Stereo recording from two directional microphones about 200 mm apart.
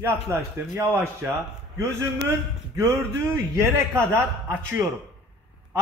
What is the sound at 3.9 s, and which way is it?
Speech, 10° right (ahead or behind).